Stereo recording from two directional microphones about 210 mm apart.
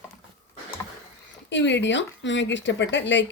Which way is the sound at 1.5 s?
55° left (ahead or behind).